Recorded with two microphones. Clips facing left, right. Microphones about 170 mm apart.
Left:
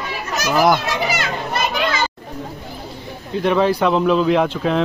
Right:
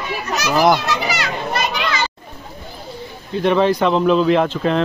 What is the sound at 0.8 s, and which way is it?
Children playing, 50° left (ahead or behind).